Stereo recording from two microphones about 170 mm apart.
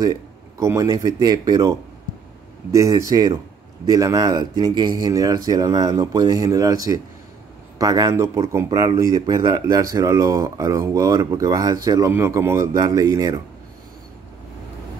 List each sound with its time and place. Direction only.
0.0 s speech: 20° right (ahead or behind)